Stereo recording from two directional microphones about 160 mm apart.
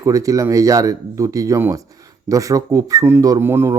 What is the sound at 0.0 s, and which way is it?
Speech, 20° right (ahead or behind).